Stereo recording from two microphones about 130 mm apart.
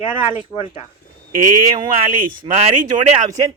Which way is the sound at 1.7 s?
35° right (ahead or behind).